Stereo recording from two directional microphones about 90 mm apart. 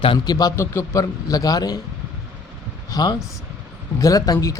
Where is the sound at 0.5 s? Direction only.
30° left (ahead or behind).